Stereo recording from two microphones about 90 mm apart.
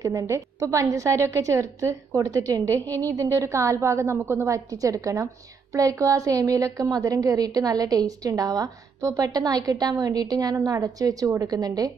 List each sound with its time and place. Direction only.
0.0 s a woman's voice: 40° right (ahead or behind)
4.6 s a woman's voice: 40° right (ahead or behind)